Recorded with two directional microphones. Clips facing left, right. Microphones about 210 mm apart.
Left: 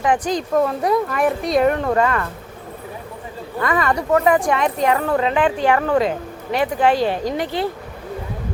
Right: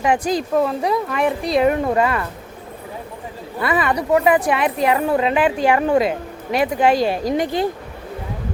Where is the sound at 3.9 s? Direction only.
15° right (ahead or behind).